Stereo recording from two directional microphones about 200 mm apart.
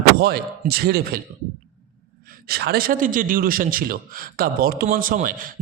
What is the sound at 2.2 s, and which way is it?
A man's voice, 50° right (ahead or behind).